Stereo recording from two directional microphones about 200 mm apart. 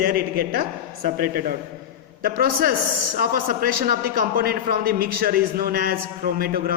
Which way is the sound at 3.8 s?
50° right (ahead or behind).